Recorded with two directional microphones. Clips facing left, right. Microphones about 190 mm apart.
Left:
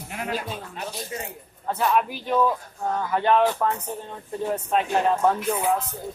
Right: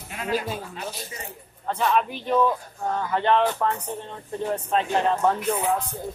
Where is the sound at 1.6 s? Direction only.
5° left (ahead or behind).